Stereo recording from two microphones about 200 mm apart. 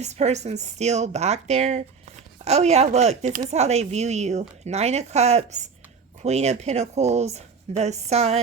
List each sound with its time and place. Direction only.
0.0 s speech: 35° right (ahead or behind)